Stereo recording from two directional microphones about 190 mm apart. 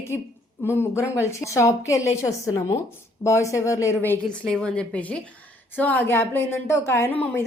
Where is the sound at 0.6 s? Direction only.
15° left (ahead or behind).